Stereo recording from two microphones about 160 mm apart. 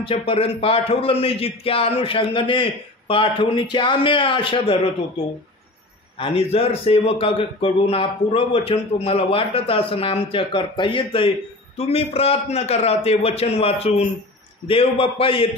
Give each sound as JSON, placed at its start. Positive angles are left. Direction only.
{"t": 0.0, "sound": "a man's voice", "side_deg": 35}
{"t": 6.1, "sound": "a man's voice", "side_deg": 35}